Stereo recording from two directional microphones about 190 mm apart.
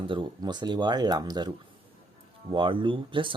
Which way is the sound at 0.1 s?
25° right (ahead or behind).